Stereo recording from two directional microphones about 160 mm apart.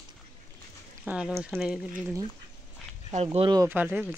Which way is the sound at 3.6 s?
10° right (ahead or behind).